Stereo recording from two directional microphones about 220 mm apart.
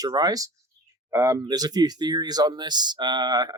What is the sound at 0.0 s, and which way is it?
Speech, 20° right (ahead or behind).